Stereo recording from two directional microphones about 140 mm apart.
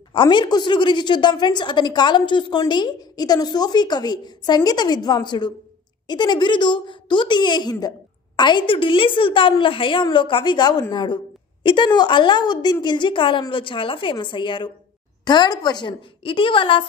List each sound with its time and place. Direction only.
0.1 s a woman's voice: 35° left (ahead or behind)